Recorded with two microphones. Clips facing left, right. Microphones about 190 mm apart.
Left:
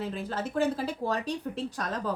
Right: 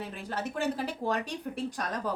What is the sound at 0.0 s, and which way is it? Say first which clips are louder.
Speech: left 3 dB; 15° right (ahead or behind).